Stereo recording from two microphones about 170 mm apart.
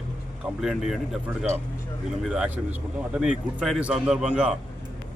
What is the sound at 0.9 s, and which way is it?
Speech, centre (ahead or behind).